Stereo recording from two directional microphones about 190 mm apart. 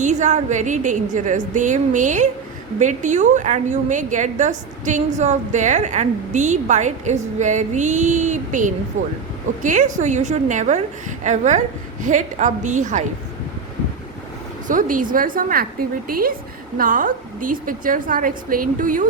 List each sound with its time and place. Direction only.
0.0 s a woman's voice: 40° right (ahead or behind)
14.7 s a woman's voice: 45° right (ahead or behind)